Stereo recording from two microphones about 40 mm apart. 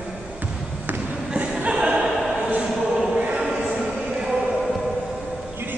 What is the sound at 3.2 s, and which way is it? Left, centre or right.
Choir, right.